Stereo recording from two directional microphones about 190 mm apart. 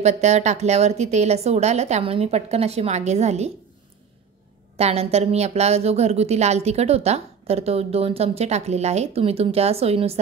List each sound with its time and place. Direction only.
0.0 s a woman's voice: 35° right (ahead or behind)
4.7 s a woman's voice: 35° right (ahead or behind)